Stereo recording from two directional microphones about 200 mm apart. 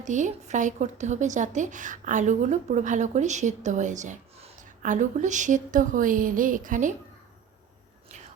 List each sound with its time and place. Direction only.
0.0 s speech: 40° right (ahead or behind)